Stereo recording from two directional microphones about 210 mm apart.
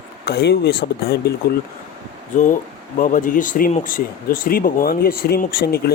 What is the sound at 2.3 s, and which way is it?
Speech, 40° left (ahead or behind).